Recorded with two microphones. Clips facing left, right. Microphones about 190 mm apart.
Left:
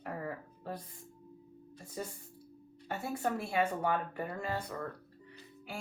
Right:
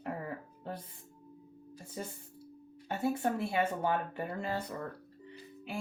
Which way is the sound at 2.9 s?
25° right (ahead or behind).